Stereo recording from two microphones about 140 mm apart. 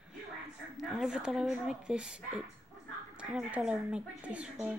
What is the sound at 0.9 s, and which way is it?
A woman's voice, 5° right (ahead or behind).